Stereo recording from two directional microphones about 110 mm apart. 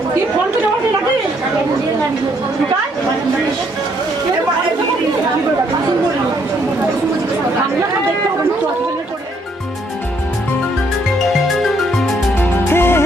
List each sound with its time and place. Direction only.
11.4 s music: centre (ahead or behind)
12.4 s music: 20° left (ahead or behind)